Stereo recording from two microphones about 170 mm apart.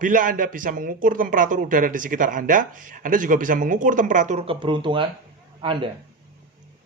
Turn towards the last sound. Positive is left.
turn(degrees=-30)  # may be behind; listen again after turning